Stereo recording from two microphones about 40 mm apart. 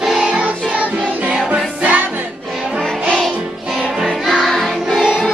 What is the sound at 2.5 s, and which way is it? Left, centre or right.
Music, centre.